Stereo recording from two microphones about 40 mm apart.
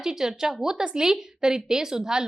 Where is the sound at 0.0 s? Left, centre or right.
Centre.